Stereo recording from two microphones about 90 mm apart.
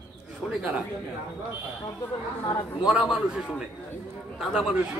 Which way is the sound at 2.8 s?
10° right (ahead or behind).